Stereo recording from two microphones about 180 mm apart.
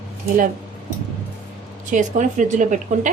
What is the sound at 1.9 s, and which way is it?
Speech, 45° right (ahead or behind).